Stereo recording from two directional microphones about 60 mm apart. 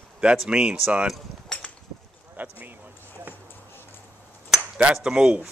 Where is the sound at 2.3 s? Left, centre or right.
Right.